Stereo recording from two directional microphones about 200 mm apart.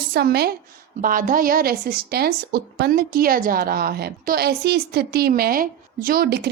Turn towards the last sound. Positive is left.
turn(degrees=-50)  # may be behind; listen again after turning